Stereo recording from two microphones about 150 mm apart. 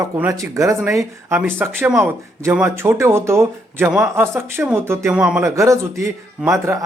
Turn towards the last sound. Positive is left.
turn(degrees=-15)  # may be behind; listen again after turning